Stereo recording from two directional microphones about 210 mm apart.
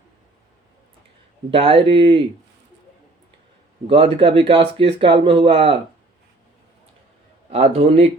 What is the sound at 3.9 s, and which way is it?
Speech, 25° right (ahead or behind).